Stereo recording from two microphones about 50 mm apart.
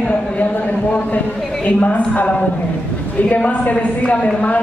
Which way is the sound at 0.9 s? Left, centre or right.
Left.